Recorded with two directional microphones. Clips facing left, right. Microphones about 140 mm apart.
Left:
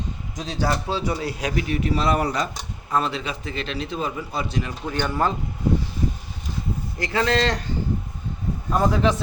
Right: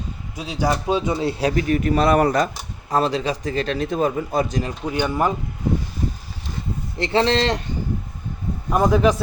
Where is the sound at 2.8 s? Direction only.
35° right (ahead or behind).